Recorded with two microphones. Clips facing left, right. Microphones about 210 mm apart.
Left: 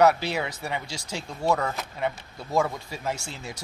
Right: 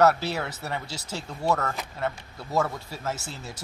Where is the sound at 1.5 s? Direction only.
10° left (ahead or behind).